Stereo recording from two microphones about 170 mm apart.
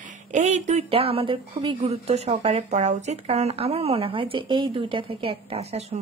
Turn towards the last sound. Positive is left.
turn(degrees=-40)  # may be behind; listen again after turning